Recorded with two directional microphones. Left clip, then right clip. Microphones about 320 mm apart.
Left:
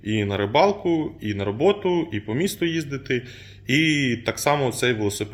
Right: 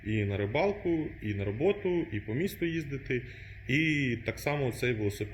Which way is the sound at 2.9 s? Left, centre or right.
Left.